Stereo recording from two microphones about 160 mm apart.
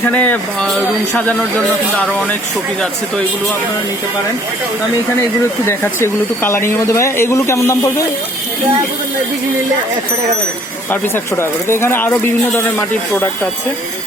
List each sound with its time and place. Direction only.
0.1 s speech: 10° left (ahead or behind)
5.6 s speech: 15° left (ahead or behind)
11.1 s speech: 15° left (ahead or behind)